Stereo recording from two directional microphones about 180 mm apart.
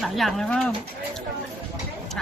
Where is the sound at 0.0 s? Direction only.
Centre (ahead or behind).